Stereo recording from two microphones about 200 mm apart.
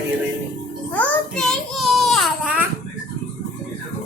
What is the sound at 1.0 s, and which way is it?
Child singing, 5° left (ahead or behind).